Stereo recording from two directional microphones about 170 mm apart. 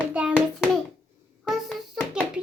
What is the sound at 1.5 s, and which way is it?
Music, centre (ahead or behind).